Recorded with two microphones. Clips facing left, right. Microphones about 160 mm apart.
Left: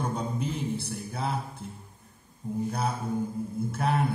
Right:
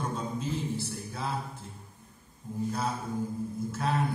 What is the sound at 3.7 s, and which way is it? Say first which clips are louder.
Speech: left 3 dB; 60° left (ahead or behind).